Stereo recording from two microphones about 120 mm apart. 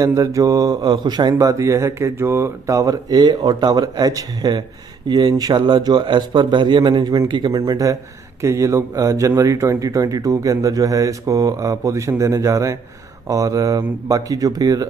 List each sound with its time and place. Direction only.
0.0 s speech: 30° right (ahead or behind)